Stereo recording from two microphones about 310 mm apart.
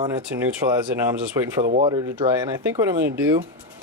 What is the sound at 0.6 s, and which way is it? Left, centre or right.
Speech, centre.